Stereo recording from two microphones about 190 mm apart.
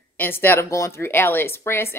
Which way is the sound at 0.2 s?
10° left (ahead or behind).